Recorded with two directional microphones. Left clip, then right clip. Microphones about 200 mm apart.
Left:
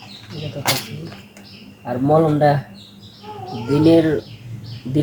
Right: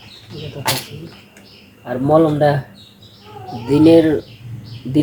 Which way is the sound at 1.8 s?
30° right (ahead or behind).